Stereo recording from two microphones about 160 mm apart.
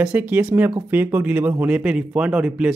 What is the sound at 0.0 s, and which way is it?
Speech, 10° right (ahead or behind).